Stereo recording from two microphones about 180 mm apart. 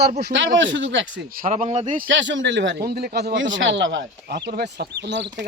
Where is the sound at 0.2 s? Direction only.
75° right (ahead or behind).